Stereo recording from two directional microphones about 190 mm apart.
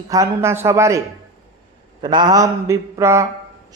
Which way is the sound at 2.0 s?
25° right (ahead or behind).